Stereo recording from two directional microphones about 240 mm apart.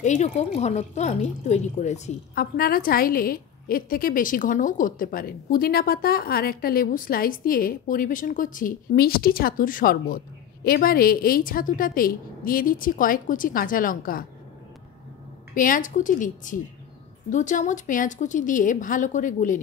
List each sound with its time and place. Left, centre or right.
0.0 s a woman's voice: left
15.5 s a woman's voice: left